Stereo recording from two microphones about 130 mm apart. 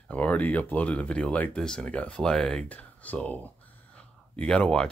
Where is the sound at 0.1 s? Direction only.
10° left (ahead or behind).